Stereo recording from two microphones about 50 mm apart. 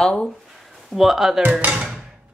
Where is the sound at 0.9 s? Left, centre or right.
Centre.